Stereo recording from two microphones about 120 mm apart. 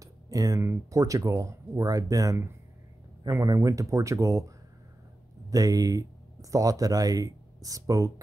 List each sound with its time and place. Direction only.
0.0 s speech: 30° right (ahead or behind)
5.5 s speech: 30° right (ahead or behind)